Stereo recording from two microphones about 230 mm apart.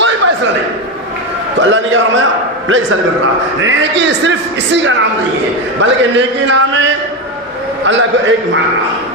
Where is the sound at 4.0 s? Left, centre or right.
Right.